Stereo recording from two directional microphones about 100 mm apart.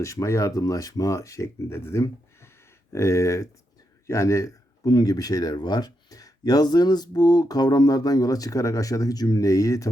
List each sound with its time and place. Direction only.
0.0 s speech: 30° left (ahead or behind)